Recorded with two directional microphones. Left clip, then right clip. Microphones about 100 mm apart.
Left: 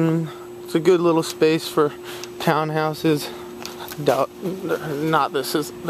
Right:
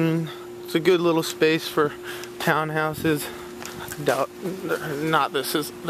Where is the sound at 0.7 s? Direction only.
20° left (ahead or behind).